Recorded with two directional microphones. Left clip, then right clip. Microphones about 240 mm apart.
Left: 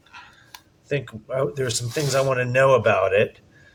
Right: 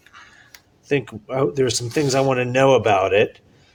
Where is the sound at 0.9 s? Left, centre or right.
Right.